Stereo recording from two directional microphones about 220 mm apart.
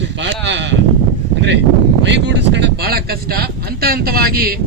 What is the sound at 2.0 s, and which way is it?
Speech, 55° right (ahead or behind).